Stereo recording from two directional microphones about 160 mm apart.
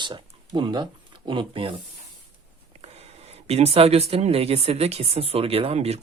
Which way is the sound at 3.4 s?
40° right (ahead or behind).